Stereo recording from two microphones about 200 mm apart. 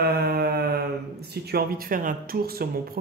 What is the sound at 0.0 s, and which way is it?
Mantra, 50° right (ahead or behind).